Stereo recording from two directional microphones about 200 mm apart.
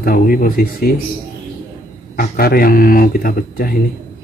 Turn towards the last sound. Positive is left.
turn(degrees=45)  # may be behind; listen again after turning